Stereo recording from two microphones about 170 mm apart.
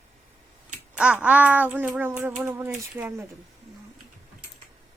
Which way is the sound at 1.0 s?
5° right (ahead or behind).